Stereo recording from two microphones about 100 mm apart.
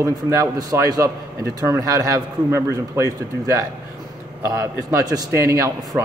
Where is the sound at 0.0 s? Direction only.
35° right (ahead or behind).